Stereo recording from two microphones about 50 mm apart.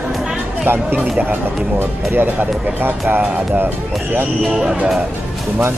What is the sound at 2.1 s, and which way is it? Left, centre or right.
Speech, right.